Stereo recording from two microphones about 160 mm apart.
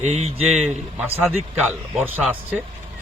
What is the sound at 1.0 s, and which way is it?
A man's voice, 15° right (ahead or behind).